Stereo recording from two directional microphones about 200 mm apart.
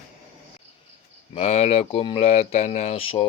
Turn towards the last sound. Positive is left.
turn(degrees=30)  # may be behind; listen again after turning